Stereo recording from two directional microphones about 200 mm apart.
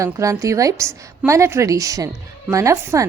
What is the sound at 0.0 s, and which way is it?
A woman's voice, 15° right (ahead or behind).